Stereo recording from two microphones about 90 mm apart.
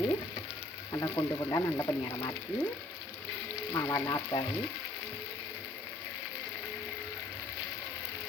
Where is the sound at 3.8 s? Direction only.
35° left (ahead or behind).